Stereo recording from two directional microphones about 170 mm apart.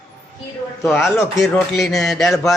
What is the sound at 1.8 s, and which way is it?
Speech, centre (ahead or behind).